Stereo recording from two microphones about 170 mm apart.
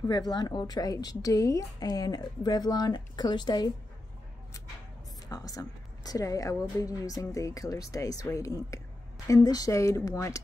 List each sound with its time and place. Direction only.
0.0 s a woman's voice: 25° left (ahead or behind)
5.3 s a woman's voice: 20° left (ahead or behind)